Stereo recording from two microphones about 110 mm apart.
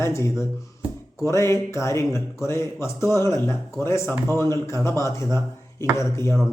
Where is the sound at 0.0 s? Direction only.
25° left (ahead or behind).